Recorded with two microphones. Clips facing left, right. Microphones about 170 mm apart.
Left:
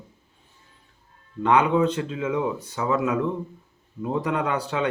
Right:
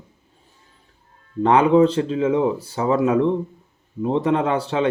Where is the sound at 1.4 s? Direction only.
30° right (ahead or behind).